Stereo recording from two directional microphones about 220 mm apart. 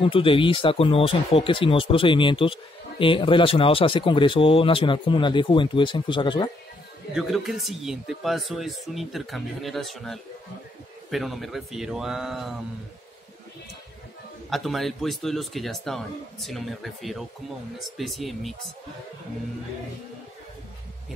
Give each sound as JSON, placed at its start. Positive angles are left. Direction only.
{"t": 0.0, "sound": "speech", "side_deg": 25}
{"t": 7.2, "sound": "speech", "side_deg": 0}
{"t": 14.5, "sound": "speech", "side_deg": 0}